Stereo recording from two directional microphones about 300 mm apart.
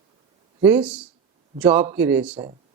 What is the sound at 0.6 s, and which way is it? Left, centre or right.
Speech, centre.